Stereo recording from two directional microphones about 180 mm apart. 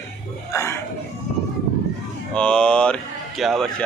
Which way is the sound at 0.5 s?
15° left (ahead or behind).